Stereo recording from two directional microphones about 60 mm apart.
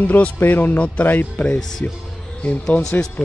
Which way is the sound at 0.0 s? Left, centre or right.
Left.